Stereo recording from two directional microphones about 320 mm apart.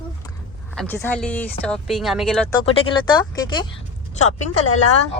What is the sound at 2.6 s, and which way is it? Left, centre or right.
Speech, centre.